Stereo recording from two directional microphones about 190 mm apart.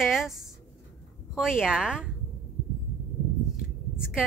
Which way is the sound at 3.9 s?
5° right (ahead or behind).